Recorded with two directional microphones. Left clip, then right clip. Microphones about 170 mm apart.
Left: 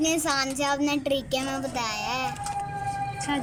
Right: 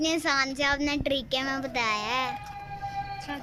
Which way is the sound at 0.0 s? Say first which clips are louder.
Left 1 dB; 15° left (ahead or behind).